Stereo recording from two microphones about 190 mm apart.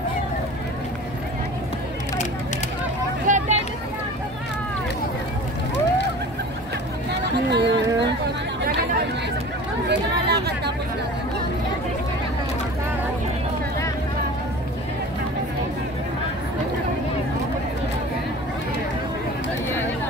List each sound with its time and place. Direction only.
3.3 s vehicle: 40° right (ahead or behind)
7.1 s a sound: 65° right (ahead or behind)
9.8 s chatter: 60° right (ahead or behind)